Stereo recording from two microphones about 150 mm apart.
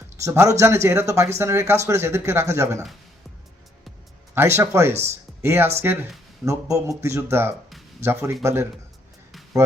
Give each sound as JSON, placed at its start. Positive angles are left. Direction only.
{"t": 0.2, "sound": "speech", "side_deg": -20}
{"t": 4.4, "sound": "speech", "side_deg": -15}